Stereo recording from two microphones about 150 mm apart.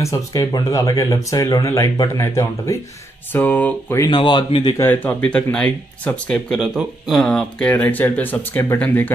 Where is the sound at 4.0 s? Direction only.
30° left (ahead or behind).